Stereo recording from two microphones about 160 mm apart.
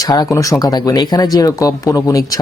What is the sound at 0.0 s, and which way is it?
Speech, 25° left (ahead or behind).